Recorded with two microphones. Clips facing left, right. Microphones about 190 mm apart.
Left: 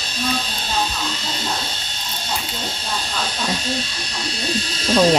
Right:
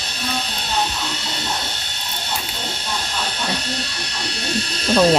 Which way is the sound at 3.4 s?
65° right (ahead or behind).